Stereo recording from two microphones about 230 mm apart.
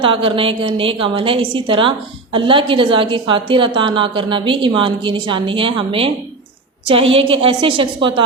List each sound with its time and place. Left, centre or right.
0.0 s a woman's voice: right